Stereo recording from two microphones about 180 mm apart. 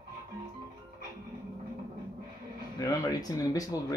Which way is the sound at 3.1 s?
20° left (ahead or behind).